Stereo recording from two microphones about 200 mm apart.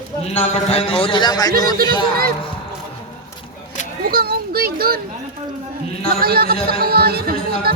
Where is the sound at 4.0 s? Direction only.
50° right (ahead or behind).